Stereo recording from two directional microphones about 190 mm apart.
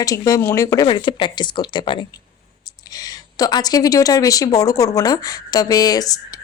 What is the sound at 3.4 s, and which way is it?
Speech, 20° left (ahead or behind).